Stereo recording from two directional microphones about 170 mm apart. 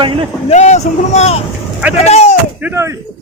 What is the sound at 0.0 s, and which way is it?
Speech, 30° right (ahead or behind).